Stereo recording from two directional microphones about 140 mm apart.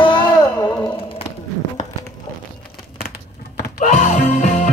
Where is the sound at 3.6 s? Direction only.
75° left (ahead or behind); by 4.6 s 55° left (ahead or behind).